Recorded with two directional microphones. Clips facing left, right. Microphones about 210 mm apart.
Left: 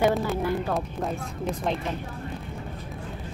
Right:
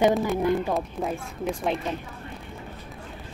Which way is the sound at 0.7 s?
Centre (ahead or behind).